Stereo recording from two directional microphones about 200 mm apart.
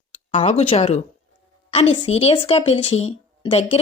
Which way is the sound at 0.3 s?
30° left (ahead or behind).